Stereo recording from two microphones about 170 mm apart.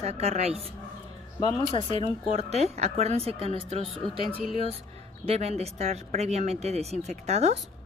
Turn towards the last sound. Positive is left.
turn(degrees=-40)  # may be behind; listen again after turning